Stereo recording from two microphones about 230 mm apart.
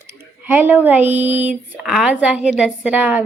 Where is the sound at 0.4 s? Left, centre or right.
Centre.